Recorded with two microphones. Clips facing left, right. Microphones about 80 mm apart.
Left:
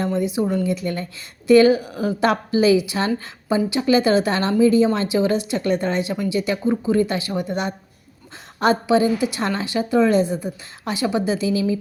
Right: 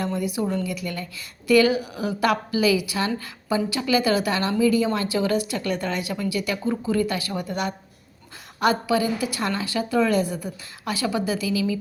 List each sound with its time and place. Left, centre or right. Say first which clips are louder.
0.0 s a woman's voice: left 4 dB; left
0.6 s a woman's voice: left 6 dB; left